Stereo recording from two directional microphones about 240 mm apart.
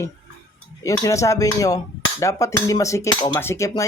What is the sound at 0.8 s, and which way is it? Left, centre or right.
Speech, centre.